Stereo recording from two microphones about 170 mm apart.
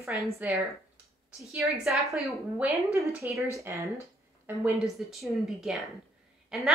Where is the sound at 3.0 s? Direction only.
15° right (ahead or behind).